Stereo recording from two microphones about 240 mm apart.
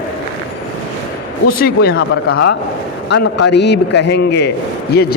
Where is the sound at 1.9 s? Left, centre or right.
Left.